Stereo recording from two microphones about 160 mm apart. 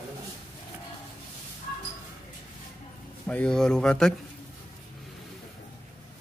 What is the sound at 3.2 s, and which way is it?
Speech, 5° left (ahead or behind).